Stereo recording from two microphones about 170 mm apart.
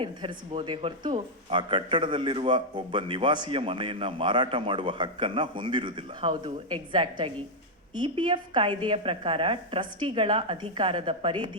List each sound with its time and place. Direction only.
0.0 s speech: 30° right (ahead or behind)